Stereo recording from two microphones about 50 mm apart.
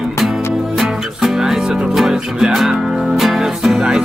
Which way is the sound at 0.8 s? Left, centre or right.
Centre.